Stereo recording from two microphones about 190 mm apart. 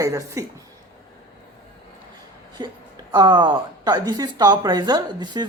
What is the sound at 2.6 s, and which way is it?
Speech, 25° right (ahead or behind).